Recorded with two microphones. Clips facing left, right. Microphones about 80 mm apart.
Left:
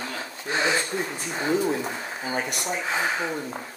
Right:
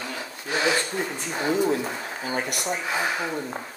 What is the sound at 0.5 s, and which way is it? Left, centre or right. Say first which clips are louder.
Speech: right 1 dB; left.